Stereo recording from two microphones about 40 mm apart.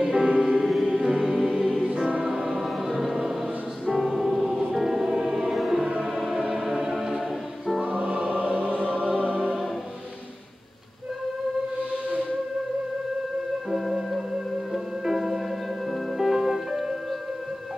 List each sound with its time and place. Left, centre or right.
0.0 s music: centre
2.0 s music: right
2.5 s music: centre
7.8 s music: right
8.9 s music: left
9.2 s music: right
13.7 s music: centre